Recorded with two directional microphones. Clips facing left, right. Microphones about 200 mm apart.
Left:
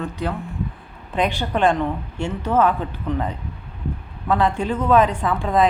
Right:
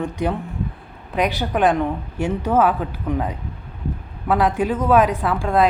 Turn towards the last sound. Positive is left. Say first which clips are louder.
# right 1 dB
turn(degrees=0)  # may be behind; listen again after turning